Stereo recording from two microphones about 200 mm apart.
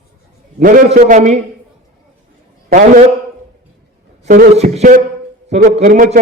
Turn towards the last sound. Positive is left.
turn(degrees=-40)  # may be behind; listen again after turning